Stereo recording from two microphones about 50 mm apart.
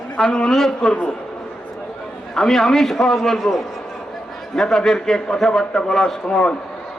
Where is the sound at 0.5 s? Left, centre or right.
Centre.